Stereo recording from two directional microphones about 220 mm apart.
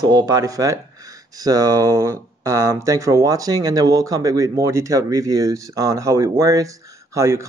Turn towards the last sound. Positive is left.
turn(degrees=-15)  # may be behind; listen again after turning